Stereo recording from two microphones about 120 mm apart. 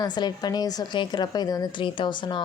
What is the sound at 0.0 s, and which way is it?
A woman's voice, 35° left (ahead or behind).